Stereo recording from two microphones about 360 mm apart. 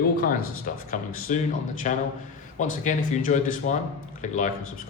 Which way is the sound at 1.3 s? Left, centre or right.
Centre.